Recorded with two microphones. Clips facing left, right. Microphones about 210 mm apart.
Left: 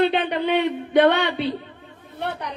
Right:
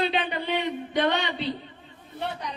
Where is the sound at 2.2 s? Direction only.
60° left (ahead or behind).